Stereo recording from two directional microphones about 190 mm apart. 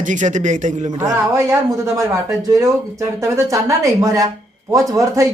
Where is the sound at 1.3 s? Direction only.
15° right (ahead or behind).